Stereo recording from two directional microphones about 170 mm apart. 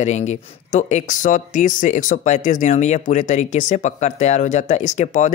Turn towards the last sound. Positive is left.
turn(degrees=45)  # may be behind; listen again after turning